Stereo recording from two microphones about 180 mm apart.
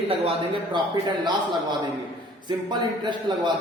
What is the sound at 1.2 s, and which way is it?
Speech, 25° right (ahead or behind).